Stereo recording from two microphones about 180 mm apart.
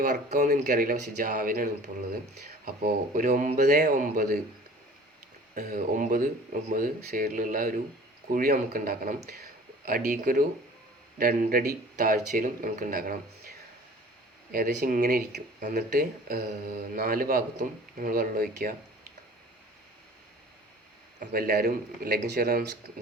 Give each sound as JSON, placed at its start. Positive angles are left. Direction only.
{"t": 0.0, "sound": "speech", "side_deg": -45}
{"t": 5.5, "sound": "speech", "side_deg": -50}
{"t": 14.5, "sound": "speech", "side_deg": -55}
{"t": 21.2, "sound": "speech", "side_deg": -55}